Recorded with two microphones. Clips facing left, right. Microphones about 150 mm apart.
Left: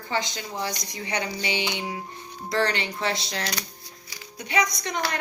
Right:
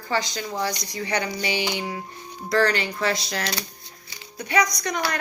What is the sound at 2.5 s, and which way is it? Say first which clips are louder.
Speech: right 4 dB; 25° left (ahead or behind).